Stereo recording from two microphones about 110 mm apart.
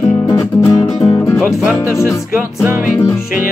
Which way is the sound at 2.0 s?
25° left (ahead or behind).